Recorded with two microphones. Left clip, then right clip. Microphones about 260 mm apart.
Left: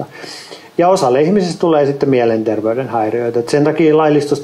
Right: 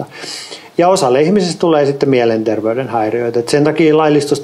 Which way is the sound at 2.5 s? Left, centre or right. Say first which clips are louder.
Right 1 dB; right.